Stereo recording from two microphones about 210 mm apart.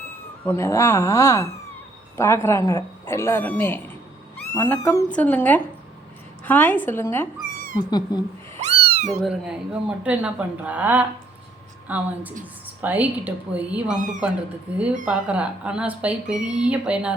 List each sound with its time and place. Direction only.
0.4 s speech: 10° left (ahead or behind)
8.5 s cat: 30° right (ahead or behind)
9.0 s a woman's voice: centre (ahead or behind)